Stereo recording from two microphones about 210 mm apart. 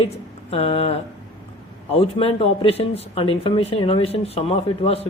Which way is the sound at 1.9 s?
30° left (ahead or behind).